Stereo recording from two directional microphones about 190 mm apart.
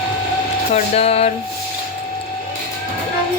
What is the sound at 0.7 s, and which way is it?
Speech, 35° left (ahead or behind).